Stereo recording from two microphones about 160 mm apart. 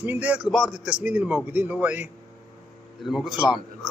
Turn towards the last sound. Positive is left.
turn(degrees=0)  # may be behind; listen again after turning